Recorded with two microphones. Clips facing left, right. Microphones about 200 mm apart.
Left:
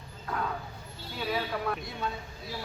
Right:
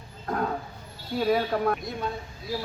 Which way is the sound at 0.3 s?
45° right (ahead or behind).